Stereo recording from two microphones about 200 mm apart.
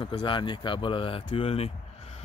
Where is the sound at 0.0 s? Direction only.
25° left (ahead or behind).